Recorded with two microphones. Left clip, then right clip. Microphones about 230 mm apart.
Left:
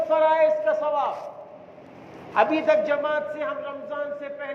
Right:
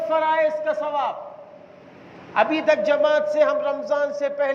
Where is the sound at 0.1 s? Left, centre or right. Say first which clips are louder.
Left 1 dB; right.